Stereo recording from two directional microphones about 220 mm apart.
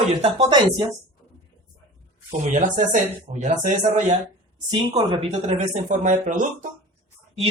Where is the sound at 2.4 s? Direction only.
35° right (ahead or behind).